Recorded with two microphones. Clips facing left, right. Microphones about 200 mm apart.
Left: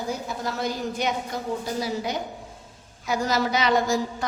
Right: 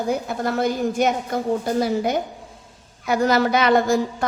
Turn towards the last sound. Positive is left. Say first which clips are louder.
# right 5 dB
turn(degrees=-55)  # may be behind; listen again after turning